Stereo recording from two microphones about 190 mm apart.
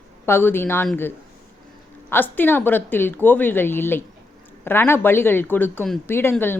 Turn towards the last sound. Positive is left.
turn(degrees=10)  # may be behind; listen again after turning